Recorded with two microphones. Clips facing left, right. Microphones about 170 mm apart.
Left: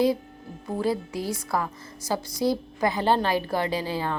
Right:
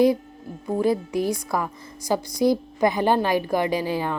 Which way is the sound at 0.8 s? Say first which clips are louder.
Right 5 dB; 15° right (ahead or behind).